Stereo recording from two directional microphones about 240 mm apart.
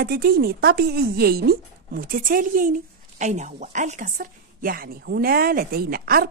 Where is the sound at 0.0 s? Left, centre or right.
Right.